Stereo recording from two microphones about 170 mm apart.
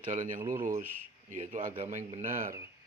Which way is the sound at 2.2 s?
15° right (ahead or behind).